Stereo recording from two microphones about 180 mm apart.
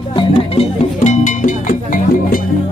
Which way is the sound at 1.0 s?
45° left (ahead or behind).